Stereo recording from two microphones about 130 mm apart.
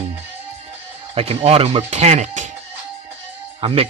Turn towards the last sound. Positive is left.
turn(degrees=-50)  # may be behind; listen again after turning